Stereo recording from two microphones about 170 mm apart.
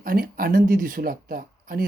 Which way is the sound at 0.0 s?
60° right (ahead or behind).